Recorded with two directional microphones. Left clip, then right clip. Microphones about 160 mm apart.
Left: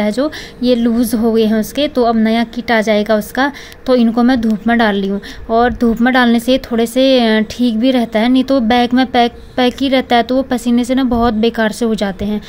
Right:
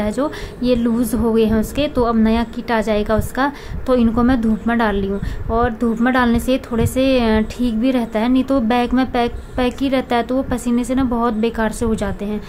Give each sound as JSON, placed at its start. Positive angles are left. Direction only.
{"t": 0.0, "sound": "a woman's voice", "side_deg": 25}